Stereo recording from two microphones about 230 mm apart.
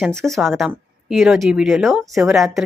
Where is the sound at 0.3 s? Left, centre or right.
Centre.